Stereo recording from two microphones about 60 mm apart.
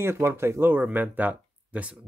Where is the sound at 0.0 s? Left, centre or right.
Right.